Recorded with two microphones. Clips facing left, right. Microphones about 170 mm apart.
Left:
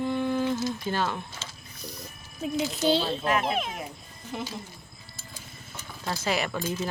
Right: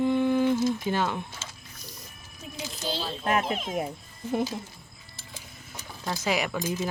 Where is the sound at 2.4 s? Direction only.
75° left (ahead or behind).